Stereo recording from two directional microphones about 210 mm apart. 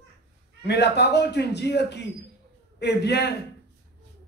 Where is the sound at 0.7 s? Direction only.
55° left (ahead or behind).